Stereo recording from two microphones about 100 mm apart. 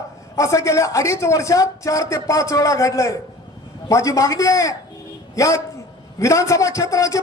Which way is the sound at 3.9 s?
35° left (ahead or behind).